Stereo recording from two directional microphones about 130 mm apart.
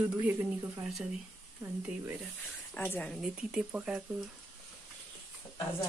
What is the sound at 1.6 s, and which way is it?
Speech, 15° right (ahead or behind).